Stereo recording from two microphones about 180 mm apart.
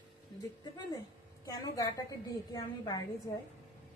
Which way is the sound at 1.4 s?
20° left (ahead or behind).